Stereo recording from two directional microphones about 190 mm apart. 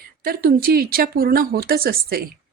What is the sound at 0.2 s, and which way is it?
Speech, 50° right (ahead or behind).